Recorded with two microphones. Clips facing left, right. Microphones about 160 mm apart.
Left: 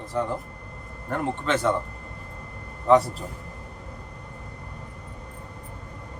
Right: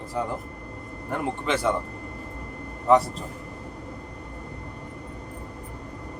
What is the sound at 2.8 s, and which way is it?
Speech, centre (ahead or behind).